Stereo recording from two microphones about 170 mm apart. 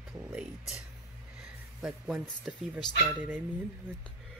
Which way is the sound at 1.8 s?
5° right (ahead or behind).